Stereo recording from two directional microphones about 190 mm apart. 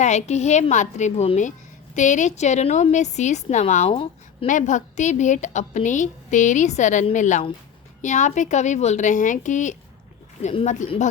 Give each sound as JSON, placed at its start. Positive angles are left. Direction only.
{"t": 0.0, "sound": "a woman's voice", "side_deg": 35}